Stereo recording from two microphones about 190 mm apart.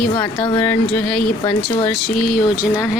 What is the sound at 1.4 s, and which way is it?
Speech, 25° left (ahead or behind).